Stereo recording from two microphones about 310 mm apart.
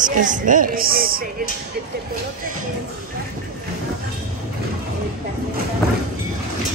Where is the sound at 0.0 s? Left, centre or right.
Right.